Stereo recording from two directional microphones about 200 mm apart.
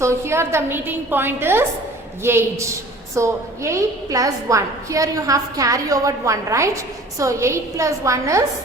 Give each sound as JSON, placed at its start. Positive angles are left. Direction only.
{"t": 0.0, "sound": "a woman's voice", "side_deg": -15}